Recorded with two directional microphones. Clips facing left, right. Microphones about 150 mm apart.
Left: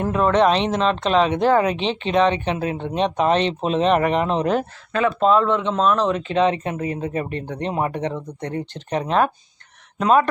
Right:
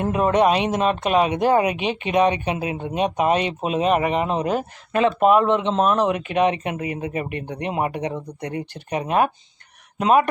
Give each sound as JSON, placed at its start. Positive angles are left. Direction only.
{"t": 0.0, "sound": "speech", "side_deg": -15}
{"t": 4.9, "sound": "speech", "side_deg": -20}